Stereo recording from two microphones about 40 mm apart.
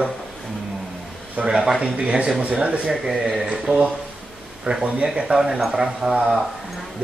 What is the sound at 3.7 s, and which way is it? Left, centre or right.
Speech, right.